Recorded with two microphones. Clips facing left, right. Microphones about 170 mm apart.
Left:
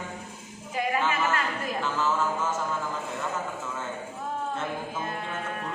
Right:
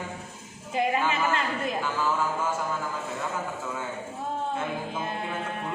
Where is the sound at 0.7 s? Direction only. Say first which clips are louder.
Right 2 dB; 25° right (ahead or behind).